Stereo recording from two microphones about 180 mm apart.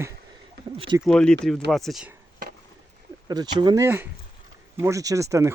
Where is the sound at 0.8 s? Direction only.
25° right (ahead or behind).